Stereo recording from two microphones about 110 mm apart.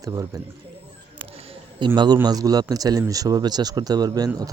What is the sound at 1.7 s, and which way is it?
A man's voice, 45° right (ahead or behind).